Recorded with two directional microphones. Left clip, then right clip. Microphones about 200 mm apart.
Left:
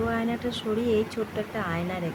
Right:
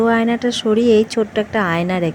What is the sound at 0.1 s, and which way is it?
Speech, 40° right (ahead or behind).